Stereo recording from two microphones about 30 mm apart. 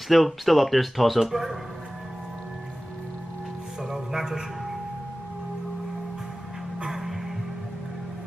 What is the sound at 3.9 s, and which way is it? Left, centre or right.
Music, centre.